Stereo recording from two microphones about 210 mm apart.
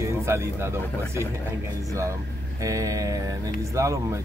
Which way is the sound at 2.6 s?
15° right (ahead or behind).